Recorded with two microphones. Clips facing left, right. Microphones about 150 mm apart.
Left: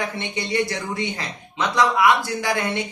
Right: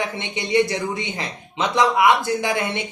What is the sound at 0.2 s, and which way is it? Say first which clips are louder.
Speech: right 6 dB; 20° right (ahead or behind).